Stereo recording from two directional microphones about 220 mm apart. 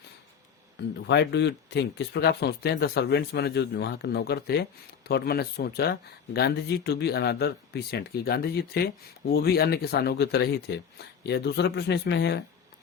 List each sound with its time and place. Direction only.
1.0 s speech: 50° left (ahead or behind)